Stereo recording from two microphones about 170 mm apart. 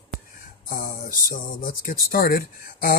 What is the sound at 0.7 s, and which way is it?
Speech, 55° left (ahead or behind).